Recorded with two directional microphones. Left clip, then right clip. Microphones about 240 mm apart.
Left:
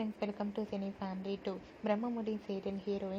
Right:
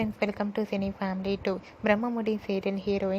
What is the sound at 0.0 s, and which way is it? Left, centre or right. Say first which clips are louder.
A woman's voice: right 9 dB; right.